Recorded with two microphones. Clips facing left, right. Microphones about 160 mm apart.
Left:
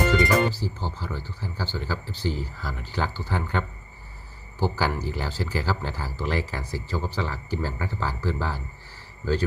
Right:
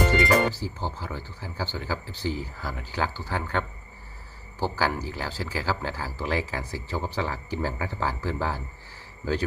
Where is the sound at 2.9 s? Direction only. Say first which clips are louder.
Left 1 dB; 5° right (ahead or behind).